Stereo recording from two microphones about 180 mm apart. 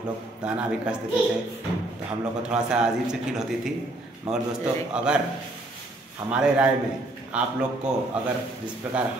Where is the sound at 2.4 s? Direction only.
5° right (ahead or behind).